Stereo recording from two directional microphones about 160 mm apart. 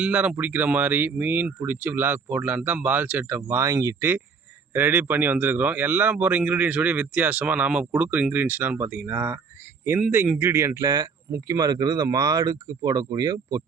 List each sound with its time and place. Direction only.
0.0 s speech: 10° right (ahead or behind)